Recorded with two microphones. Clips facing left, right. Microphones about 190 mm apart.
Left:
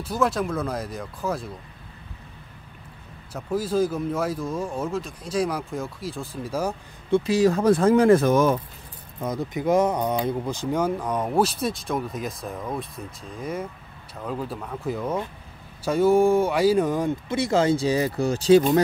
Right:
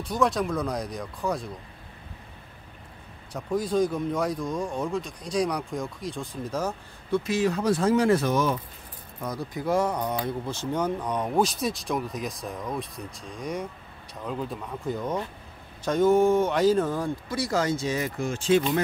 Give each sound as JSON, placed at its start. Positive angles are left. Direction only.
{"t": 0.0, "sound": "speech", "side_deg": 5}
{"t": 3.3, "sound": "speech", "side_deg": 5}
{"t": 7.1, "sound": "speech", "side_deg": 30}
{"t": 9.2, "sound": "speech", "side_deg": 20}